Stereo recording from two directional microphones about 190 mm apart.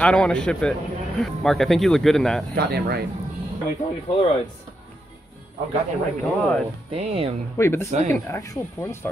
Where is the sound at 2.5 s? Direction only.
55° right (ahead or behind).